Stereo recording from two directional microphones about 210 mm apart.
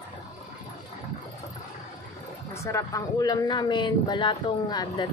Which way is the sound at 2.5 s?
15° left (ahead or behind).